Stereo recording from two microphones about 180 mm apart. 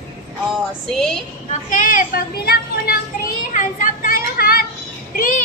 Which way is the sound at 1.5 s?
45° left (ahead or behind).